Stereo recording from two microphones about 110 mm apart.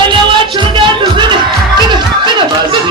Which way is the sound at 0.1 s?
50° right (ahead or behind).